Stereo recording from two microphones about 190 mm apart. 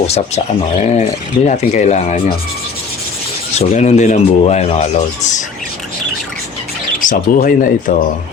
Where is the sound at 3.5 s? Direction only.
35° left (ahead or behind).